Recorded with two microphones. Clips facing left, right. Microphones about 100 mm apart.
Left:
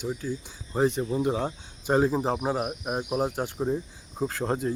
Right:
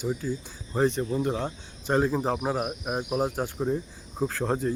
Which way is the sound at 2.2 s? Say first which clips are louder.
Even; centre (ahead or behind).